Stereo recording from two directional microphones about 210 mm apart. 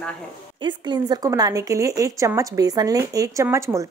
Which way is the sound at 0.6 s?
20° right (ahead or behind).